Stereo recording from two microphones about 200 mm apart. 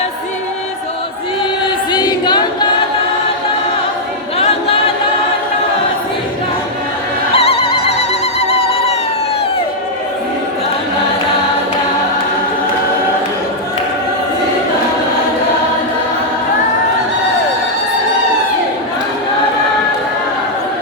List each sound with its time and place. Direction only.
1.9 s choir: 20° left (ahead or behind)
7.3 s music: 30° left (ahead or behind)